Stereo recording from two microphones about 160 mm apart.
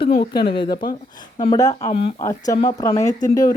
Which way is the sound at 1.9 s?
35° left (ahead or behind).